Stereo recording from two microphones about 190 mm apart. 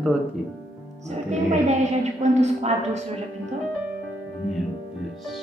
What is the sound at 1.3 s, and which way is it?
A woman's voice, 35° right (ahead or behind).